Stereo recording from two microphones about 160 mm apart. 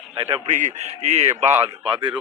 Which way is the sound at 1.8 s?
30° right (ahead or behind).